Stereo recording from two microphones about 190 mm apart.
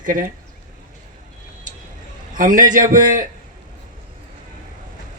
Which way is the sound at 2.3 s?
45° right (ahead or behind).